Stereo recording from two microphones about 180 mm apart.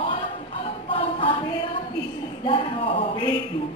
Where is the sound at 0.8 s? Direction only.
30° left (ahead or behind).